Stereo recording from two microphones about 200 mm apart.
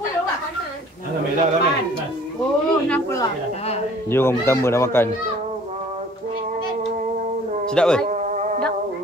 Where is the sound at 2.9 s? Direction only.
10° left (ahead or behind).